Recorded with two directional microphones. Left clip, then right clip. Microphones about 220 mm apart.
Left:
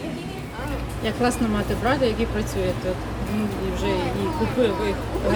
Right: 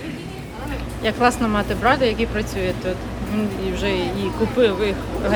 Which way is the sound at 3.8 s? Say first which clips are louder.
Right 2 dB; 5° left (ahead or behind).